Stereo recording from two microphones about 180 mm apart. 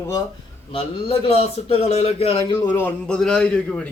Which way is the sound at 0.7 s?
30° left (ahead or behind).